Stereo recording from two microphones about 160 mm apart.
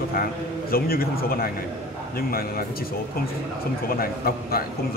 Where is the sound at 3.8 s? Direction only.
65° left (ahead or behind).